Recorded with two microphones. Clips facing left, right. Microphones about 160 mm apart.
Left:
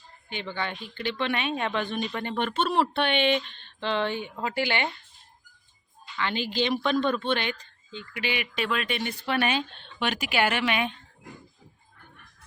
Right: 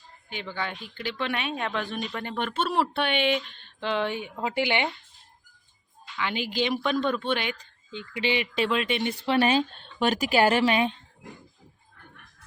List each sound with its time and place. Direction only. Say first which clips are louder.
0.3 s speech: left 1 dB; 5° right (ahead or behind)
6.1 s speech: left 1 dB; 5° right (ahead or behind)
7.9 s speech: right 4 dB; 25° right (ahead or behind)